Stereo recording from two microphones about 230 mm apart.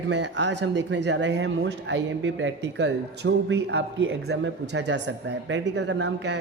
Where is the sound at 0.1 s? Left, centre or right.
Right.